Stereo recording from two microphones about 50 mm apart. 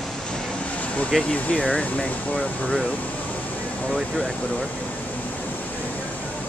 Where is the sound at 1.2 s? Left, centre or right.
Left.